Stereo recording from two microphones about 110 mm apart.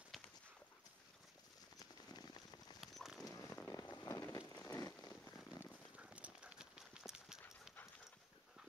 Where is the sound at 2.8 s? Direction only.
Centre (ahead or behind).